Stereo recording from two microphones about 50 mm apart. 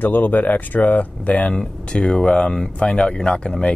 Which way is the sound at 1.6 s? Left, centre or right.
Centre.